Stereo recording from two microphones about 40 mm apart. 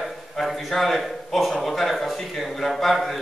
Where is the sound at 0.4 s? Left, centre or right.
Centre.